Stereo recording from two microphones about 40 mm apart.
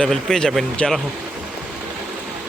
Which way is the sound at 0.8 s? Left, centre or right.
Left.